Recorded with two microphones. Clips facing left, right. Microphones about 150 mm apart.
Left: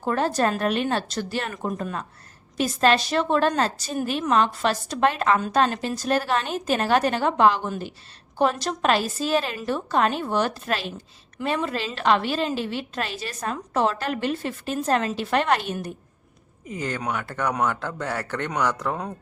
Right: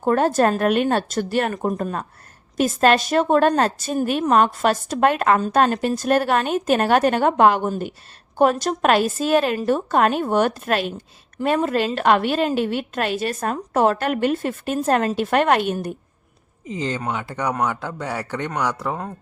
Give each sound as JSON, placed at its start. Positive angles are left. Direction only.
{"t": 0.0, "sound": "a woman's voice", "side_deg": -50}
{"t": 1.5, "sound": "a woman's voice", "side_deg": -40}
{"t": 17.1, "sound": "speech", "side_deg": -20}